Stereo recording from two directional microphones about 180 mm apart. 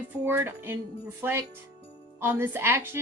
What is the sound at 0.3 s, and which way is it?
Speech, 10° right (ahead or behind).